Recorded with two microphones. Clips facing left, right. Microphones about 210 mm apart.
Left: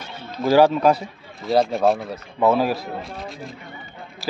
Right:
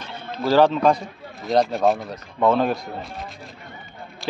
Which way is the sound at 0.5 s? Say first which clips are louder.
Left 1 dB; 10° left (ahead or behind).